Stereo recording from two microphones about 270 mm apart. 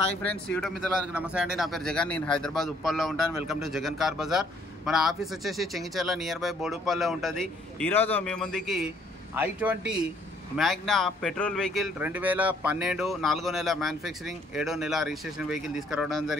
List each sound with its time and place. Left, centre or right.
0.2 s a man's voice: centre